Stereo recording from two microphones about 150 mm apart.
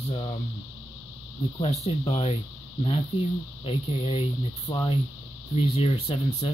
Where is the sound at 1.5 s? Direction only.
40° left (ahead or behind).